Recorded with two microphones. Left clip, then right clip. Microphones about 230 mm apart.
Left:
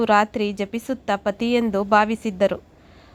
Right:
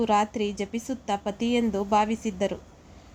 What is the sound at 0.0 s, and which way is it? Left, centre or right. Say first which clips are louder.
Speech: left 6 dB; left.